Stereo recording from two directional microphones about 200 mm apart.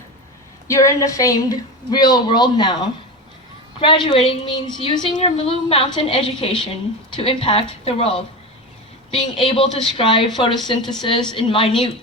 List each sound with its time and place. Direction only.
0.7 s a woman's voice: 15° left (ahead or behind)